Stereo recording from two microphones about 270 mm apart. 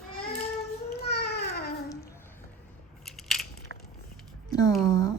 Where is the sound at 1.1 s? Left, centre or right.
Left.